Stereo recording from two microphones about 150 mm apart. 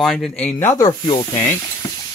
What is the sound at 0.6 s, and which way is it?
Snake, 20° left (ahead or behind).